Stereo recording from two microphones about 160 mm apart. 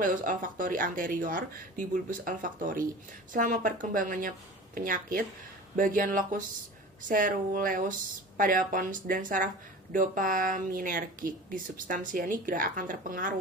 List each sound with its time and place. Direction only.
0.0 s speech: 55° right (ahead or behind)